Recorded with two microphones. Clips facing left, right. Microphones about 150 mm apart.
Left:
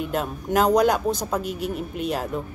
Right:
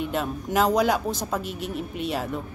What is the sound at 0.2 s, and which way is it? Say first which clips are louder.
Speech: left 2 dB; centre (ahead or behind).